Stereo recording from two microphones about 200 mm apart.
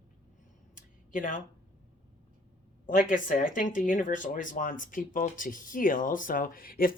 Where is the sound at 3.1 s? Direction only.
40° left (ahead or behind).